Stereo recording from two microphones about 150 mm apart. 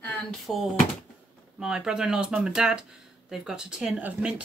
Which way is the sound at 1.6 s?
5° right (ahead or behind).